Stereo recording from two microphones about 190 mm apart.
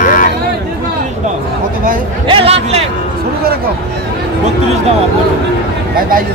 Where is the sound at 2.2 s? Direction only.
30° right (ahead or behind).